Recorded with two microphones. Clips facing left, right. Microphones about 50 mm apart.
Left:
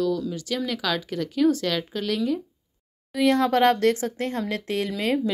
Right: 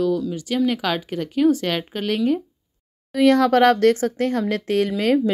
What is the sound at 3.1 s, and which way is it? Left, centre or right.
Speech, right.